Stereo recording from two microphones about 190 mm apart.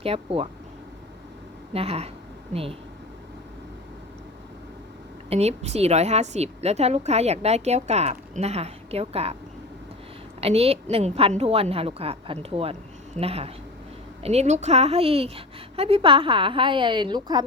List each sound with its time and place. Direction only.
0.0 s a woman's voice: 30° right (ahead or behind)
1.7 s a woman's voice: 30° right (ahead or behind)
5.3 s a woman's voice: 35° right (ahead or behind)
10.4 s a woman's voice: 30° right (ahead or behind)